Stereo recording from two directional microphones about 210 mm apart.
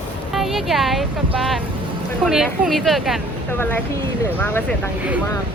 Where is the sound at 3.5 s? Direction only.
10° left (ahead or behind).